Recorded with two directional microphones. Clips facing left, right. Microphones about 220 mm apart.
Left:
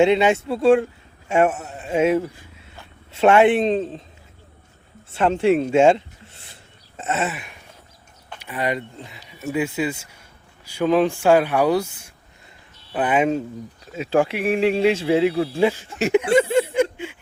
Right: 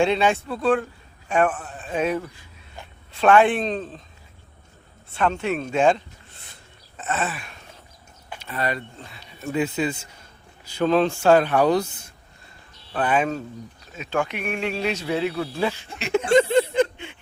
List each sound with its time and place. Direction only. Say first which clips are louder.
0.0 s a man's voice: left 4 dB; 20° left (ahead or behind)
5.1 s a man's voice: left 6 dB; 30° left (ahead or behind)
6.9 s a sound: left 3 dB; 25° left (ahead or behind)
8.4 s a man's voice: left 3 dB; 15° left (ahead or behind)
9.4 s a man's voice: left 1 dB; 5° left (ahead or behind)
13.9 s a man's voice: left 6 dB; 30° left (ahead or behind)
16.1 s a sound: even; 5° left (ahead or behind)